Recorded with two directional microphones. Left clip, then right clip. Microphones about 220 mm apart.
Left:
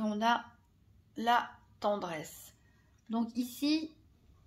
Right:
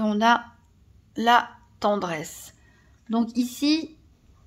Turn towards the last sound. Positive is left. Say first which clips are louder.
# right 9 dB
turn(degrees=-35)  # may be behind; listen again after turning